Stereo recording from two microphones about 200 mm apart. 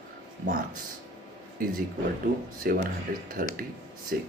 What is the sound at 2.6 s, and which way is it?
Speech, 50° right (ahead or behind).